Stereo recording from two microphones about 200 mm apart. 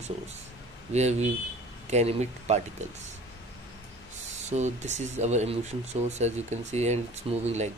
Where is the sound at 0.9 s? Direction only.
35° right (ahead or behind).